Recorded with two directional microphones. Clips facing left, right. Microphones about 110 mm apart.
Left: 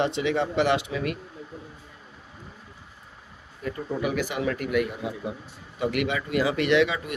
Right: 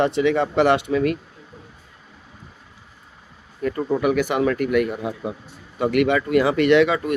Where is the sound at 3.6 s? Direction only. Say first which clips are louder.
Right 8 dB; 60° right (ahead or behind).